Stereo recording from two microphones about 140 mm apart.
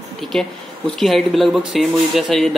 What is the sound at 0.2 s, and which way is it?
A man's voice, 5° left (ahead or behind).